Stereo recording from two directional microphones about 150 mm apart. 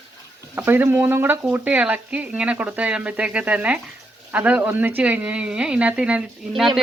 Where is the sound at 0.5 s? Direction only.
15° right (ahead or behind).